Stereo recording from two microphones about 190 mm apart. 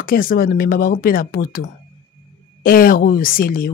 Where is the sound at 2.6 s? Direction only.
50° left (ahead or behind).